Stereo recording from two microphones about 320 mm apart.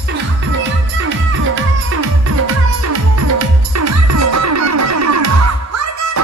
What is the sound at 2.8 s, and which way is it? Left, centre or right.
Music, right.